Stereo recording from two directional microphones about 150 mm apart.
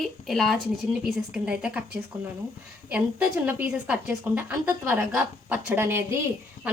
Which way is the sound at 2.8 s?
10° right (ahead or behind).